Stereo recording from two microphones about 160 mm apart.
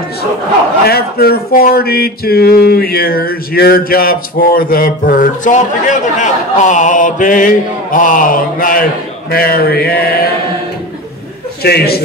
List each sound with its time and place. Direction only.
0.8 s speech: 80° left
1.8 s a sound: 75° left (ahead or behind)
9.3 s speech: 70° left (ahead or behind)
11.6 s a man's voice: 80° left